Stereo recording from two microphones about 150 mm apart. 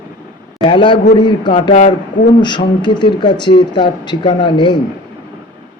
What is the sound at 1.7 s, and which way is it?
Speech, 60° left (ahead or behind).